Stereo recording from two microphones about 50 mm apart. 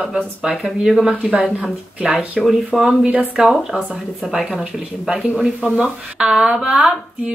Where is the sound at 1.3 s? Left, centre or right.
Right.